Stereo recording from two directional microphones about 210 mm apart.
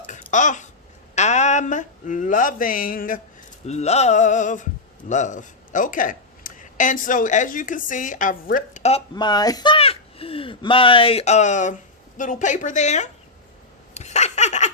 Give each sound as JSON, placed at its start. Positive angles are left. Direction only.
{"t": 0.1, "sound": "a sound", "side_deg": 35}
{"t": 1.1, "sound": "speech", "side_deg": 35}
{"t": 3.7, "sound": "a sound", "side_deg": 30}
{"t": 5.0, "sound": "speech", "side_deg": 35}
{"t": 9.1, "sound": "speech", "side_deg": 20}
{"t": 13.9, "sound": "laughter", "side_deg": 30}